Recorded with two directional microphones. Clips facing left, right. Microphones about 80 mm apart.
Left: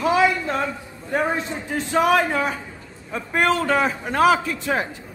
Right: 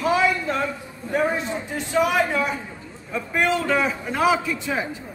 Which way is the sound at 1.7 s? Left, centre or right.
Left.